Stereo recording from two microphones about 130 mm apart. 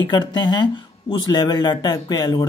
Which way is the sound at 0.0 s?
35° left (ahead or behind).